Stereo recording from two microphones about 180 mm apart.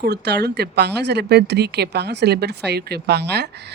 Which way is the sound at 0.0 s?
65° right (ahead or behind).